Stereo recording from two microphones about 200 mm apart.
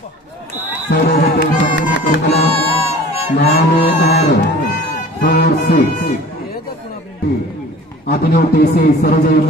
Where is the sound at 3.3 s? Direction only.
60° left (ahead or behind).